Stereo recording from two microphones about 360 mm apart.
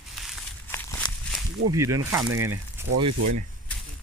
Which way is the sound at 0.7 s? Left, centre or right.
Centre.